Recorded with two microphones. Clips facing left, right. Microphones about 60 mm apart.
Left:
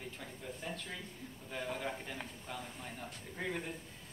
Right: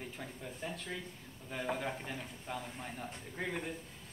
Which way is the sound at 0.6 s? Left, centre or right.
Centre.